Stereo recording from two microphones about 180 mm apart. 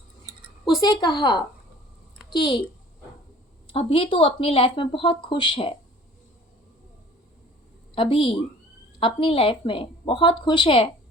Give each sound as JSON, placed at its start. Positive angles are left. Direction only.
{"t": 0.8, "sound": "speech", "side_deg": 25}
{"t": 3.7, "sound": "speech", "side_deg": 30}
{"t": 7.9, "sound": "speech", "side_deg": 30}